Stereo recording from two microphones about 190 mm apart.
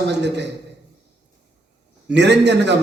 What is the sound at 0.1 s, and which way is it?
Speech, 65° right (ahead or behind).